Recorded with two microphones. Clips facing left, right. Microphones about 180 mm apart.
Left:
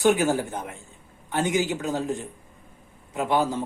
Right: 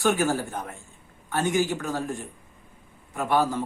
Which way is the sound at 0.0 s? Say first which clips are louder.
Left 3 dB; 20° left (ahead or behind).